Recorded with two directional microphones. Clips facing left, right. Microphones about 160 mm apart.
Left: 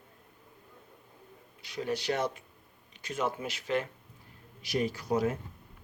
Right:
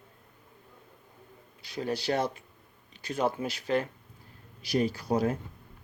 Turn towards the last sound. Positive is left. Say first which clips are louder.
# right 2 dB
turn(degrees=-35)  # may be behind; listen again after turning